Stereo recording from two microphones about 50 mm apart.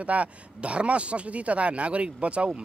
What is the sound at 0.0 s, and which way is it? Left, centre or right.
Speech, right.